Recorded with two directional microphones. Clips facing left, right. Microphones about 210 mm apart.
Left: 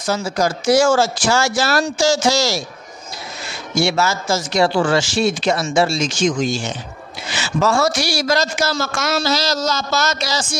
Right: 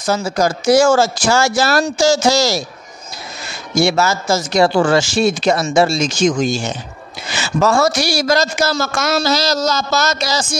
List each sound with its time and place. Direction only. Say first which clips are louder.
0.0 s a man's voice: right 3 dB; 45° right (ahead or behind)
3.7 s a man's voice: right 3 dB; 40° right (ahead or behind)